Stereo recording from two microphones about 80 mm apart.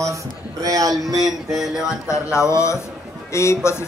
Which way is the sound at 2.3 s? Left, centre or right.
Left.